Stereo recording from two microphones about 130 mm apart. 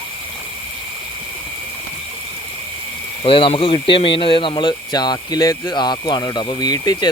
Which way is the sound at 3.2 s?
45° left (ahead or behind).